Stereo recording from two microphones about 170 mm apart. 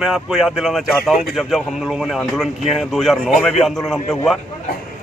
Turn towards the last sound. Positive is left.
turn(degrees=0)  # may be behind; listen again after turning